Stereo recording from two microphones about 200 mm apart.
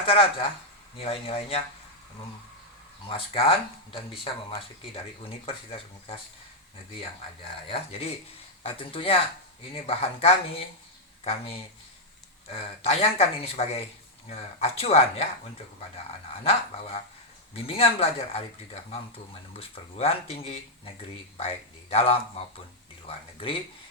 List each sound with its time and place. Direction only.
0.0 s speech: 25° left (ahead or behind)
3.1 s speech: 25° left (ahead or behind)
7.7 s speech: 30° left (ahead or behind)
16.4 s speech: 30° left (ahead or behind)